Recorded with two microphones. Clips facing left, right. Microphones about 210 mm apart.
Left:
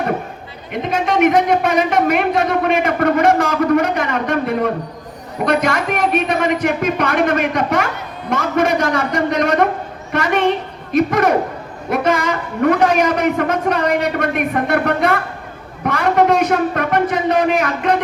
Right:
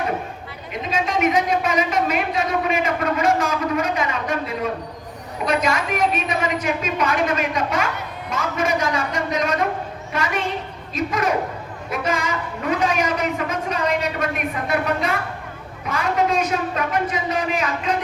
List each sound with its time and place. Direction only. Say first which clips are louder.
0.7 s a man's voice: left 5 dB; 65° left (ahead or behind)